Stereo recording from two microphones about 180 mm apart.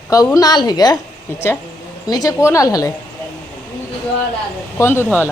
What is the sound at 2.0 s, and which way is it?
Speech, 20° left (ahead or behind).